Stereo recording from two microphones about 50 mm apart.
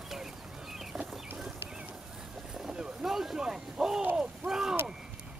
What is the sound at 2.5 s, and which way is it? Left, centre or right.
Boat, centre.